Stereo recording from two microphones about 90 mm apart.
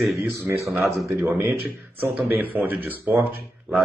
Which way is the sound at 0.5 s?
30° right (ahead or behind).